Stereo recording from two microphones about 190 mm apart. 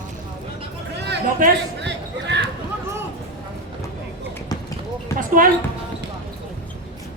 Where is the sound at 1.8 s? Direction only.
65° right (ahead or behind).